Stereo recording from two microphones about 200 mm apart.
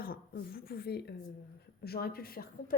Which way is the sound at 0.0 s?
45° left (ahead or behind).